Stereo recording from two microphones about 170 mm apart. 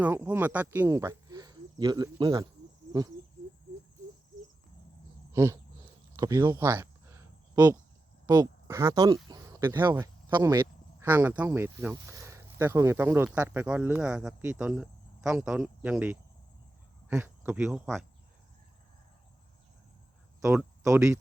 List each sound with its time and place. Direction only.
0.0 s speech: 10° right (ahead or behind)
5.3 s a sound: 15° right (ahead or behind)
8.3 s speech: 20° right (ahead or behind); by 18.0 s centre (ahead or behind)
20.8 s speech: 15° right (ahead or behind)